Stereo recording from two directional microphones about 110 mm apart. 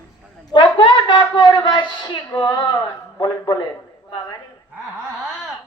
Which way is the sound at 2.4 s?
35° left (ahead or behind).